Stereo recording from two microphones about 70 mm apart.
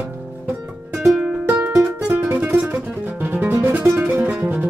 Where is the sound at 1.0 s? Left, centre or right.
Centre.